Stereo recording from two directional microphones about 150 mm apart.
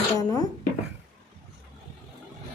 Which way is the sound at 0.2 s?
25° left (ahead or behind).